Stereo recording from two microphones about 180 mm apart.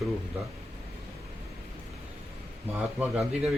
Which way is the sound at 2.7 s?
5° right (ahead or behind).